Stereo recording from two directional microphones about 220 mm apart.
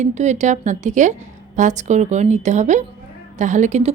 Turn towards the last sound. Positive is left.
turn(degrees=-30)  # may be behind; listen again after turning